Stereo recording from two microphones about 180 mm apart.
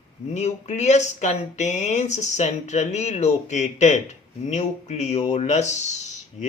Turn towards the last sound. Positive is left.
turn(degrees=40)  # may be behind; listen again after turning